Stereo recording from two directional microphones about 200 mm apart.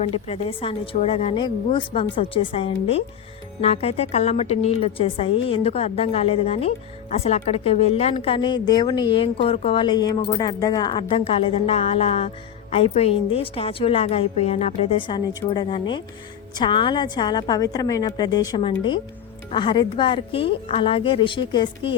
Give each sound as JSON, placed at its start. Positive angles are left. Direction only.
{"t": 0.0, "sound": "a woman's voice", "side_deg": 30}